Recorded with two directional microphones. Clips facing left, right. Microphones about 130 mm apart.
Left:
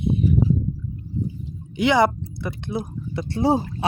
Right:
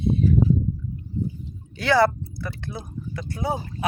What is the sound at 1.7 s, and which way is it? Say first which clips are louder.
Speech: left 1 dB; 20° left (ahead or behind).